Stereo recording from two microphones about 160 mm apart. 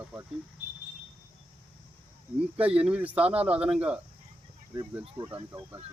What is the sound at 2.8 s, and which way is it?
Speech, 10° right (ahead or behind).